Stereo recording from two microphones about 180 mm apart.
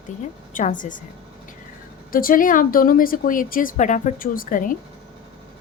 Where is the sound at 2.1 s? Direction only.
50° left (ahead or behind).